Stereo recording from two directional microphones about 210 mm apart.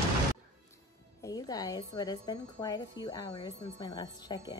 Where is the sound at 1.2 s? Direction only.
15° left (ahead or behind).